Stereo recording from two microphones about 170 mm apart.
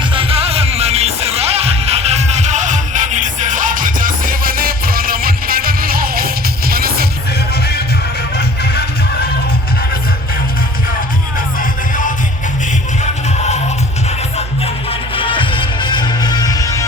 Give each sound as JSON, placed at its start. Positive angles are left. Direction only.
{"t": 0.1, "sound": "music", "side_deg": -35}
{"t": 8.4, "sound": "music", "side_deg": 70}
{"t": 14.3, "sound": "music", "side_deg": 35}